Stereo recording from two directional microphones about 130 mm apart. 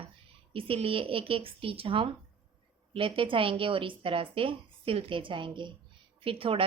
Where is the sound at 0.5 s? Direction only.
45° right (ahead or behind).